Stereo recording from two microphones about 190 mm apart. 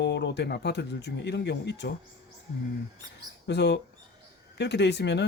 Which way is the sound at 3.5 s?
65° left (ahead or behind).